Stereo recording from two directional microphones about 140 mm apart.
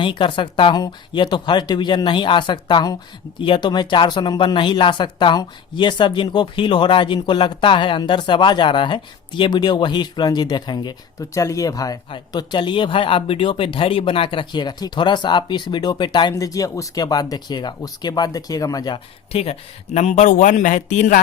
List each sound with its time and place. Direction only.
0.0 s speech: 35° left (ahead or behind)
19.3 s speech: 45° left (ahead or behind)